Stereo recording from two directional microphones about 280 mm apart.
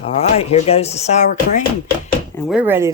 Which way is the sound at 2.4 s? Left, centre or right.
Centre.